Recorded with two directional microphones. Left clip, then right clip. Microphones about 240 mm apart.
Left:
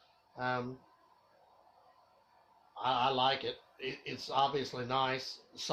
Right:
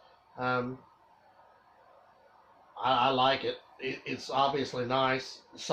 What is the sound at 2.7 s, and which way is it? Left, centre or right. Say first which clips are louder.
A man's voice: right 5 dB; left.